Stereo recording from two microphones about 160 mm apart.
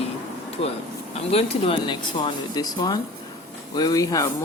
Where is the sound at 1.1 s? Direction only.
35° left (ahead or behind).